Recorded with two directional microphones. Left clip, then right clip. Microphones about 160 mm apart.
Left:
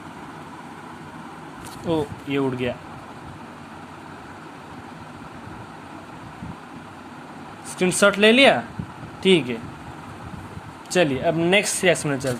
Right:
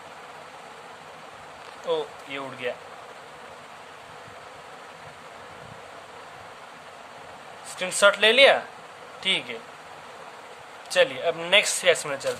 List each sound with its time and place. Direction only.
1.9 s speech: 15° left (ahead or behind)
7.8 s speech: 15° left (ahead or behind)
10.9 s speech: 10° left (ahead or behind)